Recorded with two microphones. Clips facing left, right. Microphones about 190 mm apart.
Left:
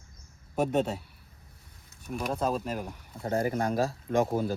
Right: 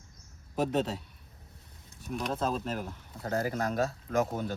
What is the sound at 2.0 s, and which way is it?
Speech, centre (ahead or behind).